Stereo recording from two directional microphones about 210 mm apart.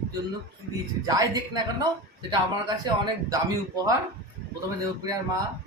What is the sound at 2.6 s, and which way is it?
Speech, 15° right (ahead or behind).